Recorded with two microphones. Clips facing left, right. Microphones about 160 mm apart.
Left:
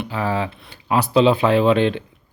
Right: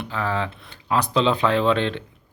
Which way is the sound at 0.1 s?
10° left (ahead or behind).